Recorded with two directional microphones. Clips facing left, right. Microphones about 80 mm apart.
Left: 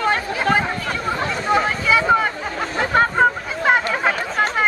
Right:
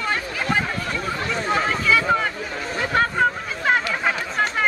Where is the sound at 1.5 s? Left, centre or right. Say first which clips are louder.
Left 3 dB; centre.